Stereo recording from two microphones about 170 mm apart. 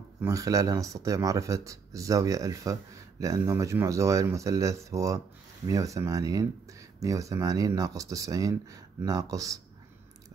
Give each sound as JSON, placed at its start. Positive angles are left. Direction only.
{"t": 0.2, "sound": "speech", "side_deg": -20}